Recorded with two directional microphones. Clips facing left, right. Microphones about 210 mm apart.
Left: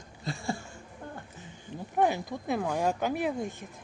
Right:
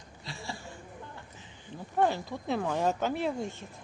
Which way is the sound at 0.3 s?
50° left (ahead or behind).